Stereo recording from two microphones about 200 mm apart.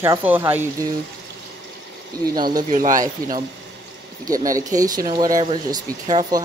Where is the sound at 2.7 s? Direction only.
40° right (ahead or behind).